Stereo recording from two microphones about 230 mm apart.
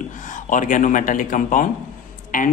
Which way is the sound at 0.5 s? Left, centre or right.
Left.